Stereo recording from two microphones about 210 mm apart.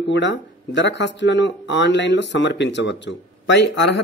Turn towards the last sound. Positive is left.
turn(degrees=60)  # may be behind; listen again after turning